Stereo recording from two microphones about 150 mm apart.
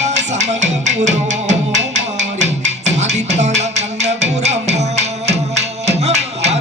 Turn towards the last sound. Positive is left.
turn(degrees=-45)  # may be behind; listen again after turning